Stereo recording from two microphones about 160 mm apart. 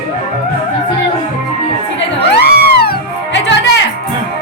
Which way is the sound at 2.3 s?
85° left.